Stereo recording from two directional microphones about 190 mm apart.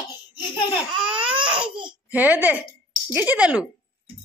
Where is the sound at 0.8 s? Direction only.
5° right (ahead or behind).